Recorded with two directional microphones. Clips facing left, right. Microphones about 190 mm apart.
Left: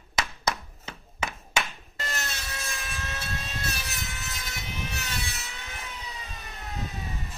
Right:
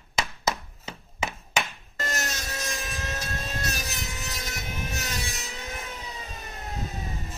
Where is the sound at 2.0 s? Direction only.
45° right (ahead or behind).